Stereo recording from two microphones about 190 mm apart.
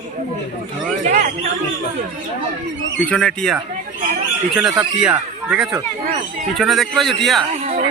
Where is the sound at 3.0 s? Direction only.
5° left (ahead or behind).